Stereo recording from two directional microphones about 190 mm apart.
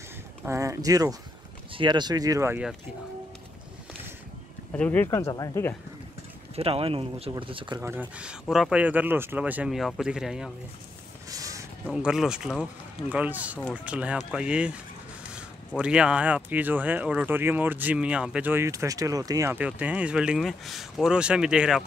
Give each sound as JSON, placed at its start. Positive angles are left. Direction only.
{"t": 0.5, "sound": "speech", "side_deg": -15}
{"t": 4.7, "sound": "speech", "side_deg": 10}
{"t": 6.5, "sound": "speech", "side_deg": -30}
{"t": 7.8, "sound": "speech", "side_deg": -10}
{"t": 11.2, "sound": "a sound", "side_deg": -20}
{"t": 11.9, "sound": "speech", "side_deg": -5}